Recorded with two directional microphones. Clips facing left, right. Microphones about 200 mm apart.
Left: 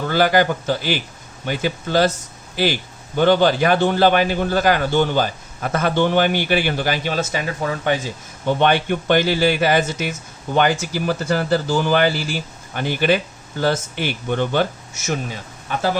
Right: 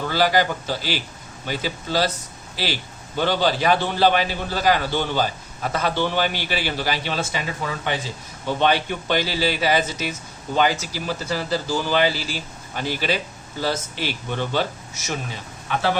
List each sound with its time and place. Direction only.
0.1 s a man's voice: 50° left (ahead or behind)
8.4 s a man's voice: 55° left (ahead or behind)